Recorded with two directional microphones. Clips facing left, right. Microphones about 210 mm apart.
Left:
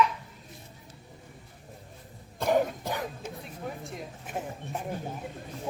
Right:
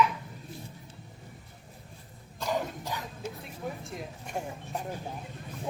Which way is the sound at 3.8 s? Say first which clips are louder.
Even; centre (ahead or behind).